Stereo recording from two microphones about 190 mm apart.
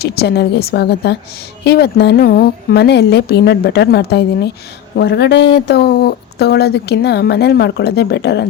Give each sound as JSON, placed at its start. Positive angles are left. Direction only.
{"t": 0.0, "sound": "a woman's voice", "side_deg": 55}